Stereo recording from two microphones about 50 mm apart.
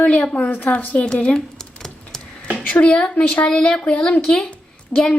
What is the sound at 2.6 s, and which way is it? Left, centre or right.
Speech, left.